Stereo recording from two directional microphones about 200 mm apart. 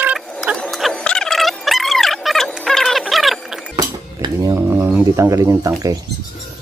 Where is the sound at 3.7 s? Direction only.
20° right (ahead or behind).